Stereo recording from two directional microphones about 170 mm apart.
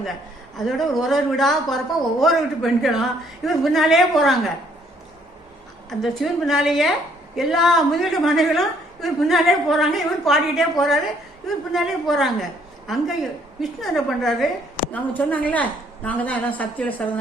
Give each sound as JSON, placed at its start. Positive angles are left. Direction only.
{"t": 0.5, "sound": "a woman's voice", "side_deg": 0}
{"t": 5.9, "sound": "a woman's voice", "side_deg": 0}